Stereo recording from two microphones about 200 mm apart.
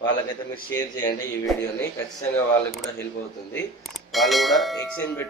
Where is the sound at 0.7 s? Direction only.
15° left (ahead or behind).